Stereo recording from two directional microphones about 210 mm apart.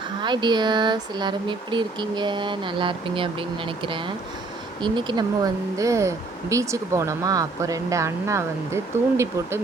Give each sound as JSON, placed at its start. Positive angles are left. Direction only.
{"t": 0.2, "sound": "speech", "side_deg": -20}